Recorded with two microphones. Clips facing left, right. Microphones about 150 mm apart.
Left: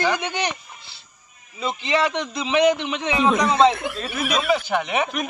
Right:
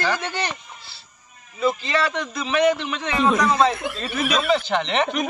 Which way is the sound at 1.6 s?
20° left (ahead or behind).